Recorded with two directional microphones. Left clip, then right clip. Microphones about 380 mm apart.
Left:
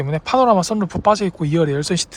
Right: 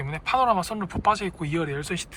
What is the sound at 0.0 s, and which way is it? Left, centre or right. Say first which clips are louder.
Speech: left 7 dB; centre.